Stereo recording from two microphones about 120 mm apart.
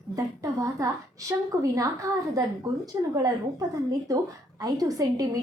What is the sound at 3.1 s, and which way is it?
A woman's voice, 30° right (ahead or behind).